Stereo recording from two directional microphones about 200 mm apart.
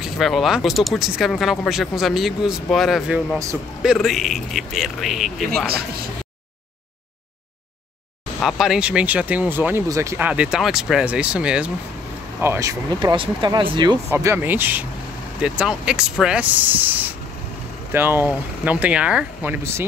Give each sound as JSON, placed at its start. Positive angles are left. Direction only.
{"t": 0.0, "sound": "speech", "side_deg": 0}
{"t": 8.4, "sound": "speech", "side_deg": 0}